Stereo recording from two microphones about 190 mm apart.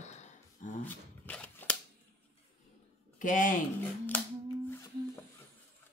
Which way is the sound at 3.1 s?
45° left (ahead or behind).